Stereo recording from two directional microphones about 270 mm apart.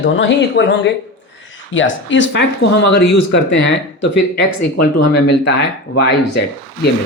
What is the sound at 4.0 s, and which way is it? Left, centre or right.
Speech, left.